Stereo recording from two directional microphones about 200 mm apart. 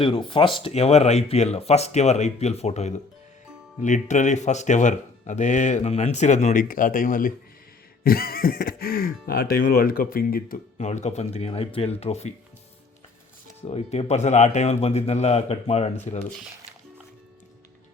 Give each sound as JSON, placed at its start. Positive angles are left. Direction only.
{"t": 0.0, "sound": "speech", "side_deg": 25}
{"t": 13.6, "sound": "speech", "side_deg": 30}